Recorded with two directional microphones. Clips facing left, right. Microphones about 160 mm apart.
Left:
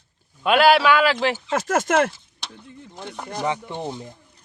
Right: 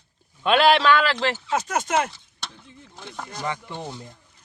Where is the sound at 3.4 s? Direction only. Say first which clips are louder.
Left 5 dB; 15° left (ahead or behind).